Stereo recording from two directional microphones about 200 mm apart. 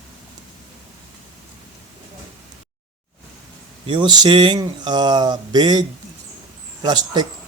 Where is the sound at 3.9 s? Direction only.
25° right (ahead or behind).